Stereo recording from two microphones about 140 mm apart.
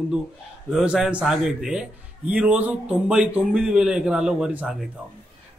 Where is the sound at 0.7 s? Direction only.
5° right (ahead or behind).